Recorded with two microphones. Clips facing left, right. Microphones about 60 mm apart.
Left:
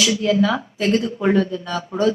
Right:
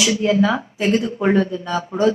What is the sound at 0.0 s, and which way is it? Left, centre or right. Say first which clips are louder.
A woman's voice: right 1 dB; centre.